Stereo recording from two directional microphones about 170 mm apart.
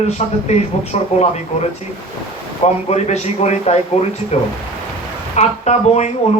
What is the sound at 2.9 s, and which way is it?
Speech, 40° left (ahead or behind).